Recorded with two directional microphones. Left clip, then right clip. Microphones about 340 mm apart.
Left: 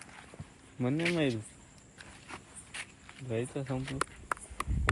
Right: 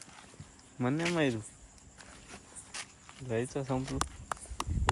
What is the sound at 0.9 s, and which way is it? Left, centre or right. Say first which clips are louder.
Speech: left 2 dB; centre.